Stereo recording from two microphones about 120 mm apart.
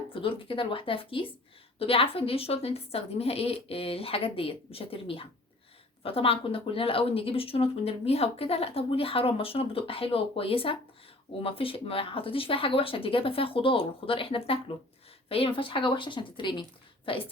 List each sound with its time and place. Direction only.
0.1 s speech: 45° left (ahead or behind)